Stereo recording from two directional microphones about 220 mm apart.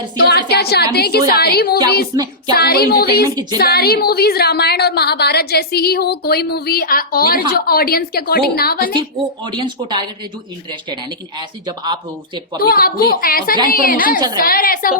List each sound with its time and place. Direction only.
0.3 s a woman's voice: 45° left (ahead or behind)
2.1 s a sound: 20° right (ahead or behind)
2.6 s a woman's voice: 45° left (ahead or behind)
3.2 s a sound: 20° right (ahead or behind)
3.6 s a woman's voice: 45° left (ahead or behind)
8.9 s a woman's voice: 20° right (ahead or behind)
11.3 s a woman's voice: 20° right (ahead or behind)
12.7 s a woman's voice: 45° left (ahead or behind)